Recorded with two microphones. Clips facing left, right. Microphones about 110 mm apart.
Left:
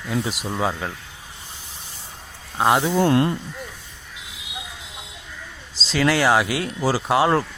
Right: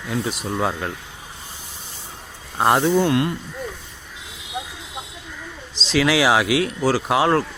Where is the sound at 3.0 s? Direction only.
30° left (ahead or behind).